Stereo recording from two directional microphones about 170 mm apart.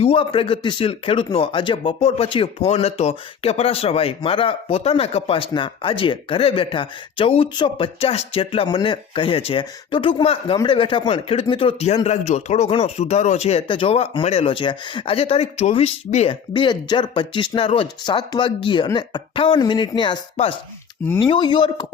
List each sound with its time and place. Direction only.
0.0 s speech: 30° left (ahead or behind)
21.2 s speech: 30° left (ahead or behind)